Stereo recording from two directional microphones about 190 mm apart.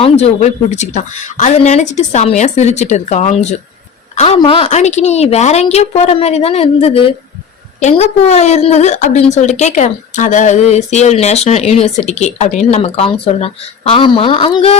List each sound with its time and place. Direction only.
0.0 s speech: 35° left (ahead or behind)